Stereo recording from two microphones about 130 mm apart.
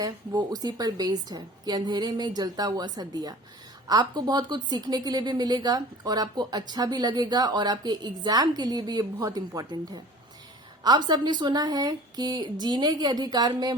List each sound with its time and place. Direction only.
0.0 s speech: 30° right (ahead or behind)